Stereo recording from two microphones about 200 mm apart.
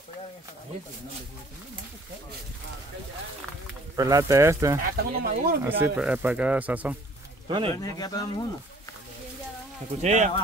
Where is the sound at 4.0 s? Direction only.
15° right (ahead or behind).